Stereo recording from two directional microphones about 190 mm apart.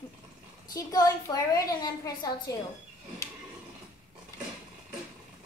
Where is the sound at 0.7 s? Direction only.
20° left (ahead or behind).